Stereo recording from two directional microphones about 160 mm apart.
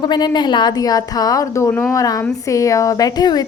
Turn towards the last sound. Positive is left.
turn(degrees=25)  # may be behind; listen again after turning